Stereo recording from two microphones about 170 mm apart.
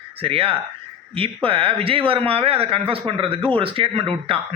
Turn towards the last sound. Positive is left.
turn(degrees=-35)  # may be behind; listen again after turning